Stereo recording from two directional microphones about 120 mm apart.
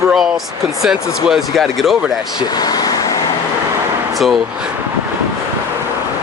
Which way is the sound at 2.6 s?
35° left (ahead or behind).